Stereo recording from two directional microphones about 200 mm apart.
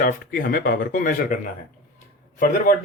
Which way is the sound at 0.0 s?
45° left (ahead or behind).